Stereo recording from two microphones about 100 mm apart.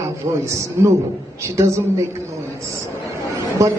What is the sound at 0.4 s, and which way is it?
A man's voice, 30° right (ahead or behind).